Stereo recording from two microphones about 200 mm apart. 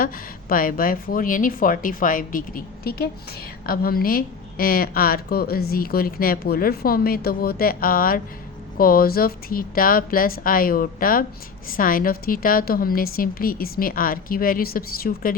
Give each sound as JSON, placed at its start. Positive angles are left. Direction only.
{"t": 0.0, "sound": "a woman's voice", "side_deg": 45}